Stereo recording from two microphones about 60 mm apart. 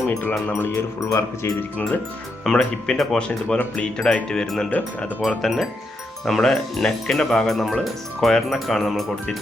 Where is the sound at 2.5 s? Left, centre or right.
Centre.